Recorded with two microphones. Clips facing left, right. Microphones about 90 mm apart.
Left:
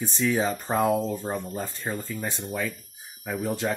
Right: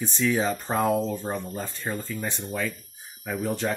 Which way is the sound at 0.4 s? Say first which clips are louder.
Even; 5° left (ahead or behind).